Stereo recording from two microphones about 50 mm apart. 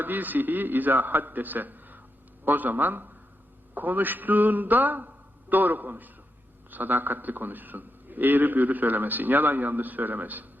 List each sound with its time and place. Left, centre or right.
0.0 s a man's voice: right